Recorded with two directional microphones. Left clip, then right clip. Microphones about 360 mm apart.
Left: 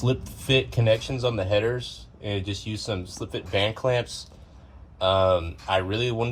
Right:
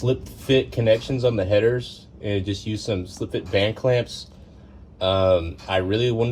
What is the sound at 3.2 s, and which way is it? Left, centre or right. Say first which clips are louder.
Speech: right 3 dB; left.